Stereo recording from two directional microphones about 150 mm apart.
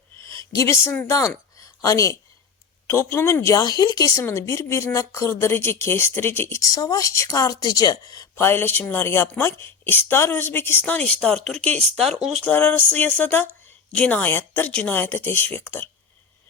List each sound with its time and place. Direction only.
0.5 s a woman's voice: 20° left (ahead or behind); by 12.5 s centre (ahead or behind)
12.5 s a woman's voice: 10° left (ahead or behind)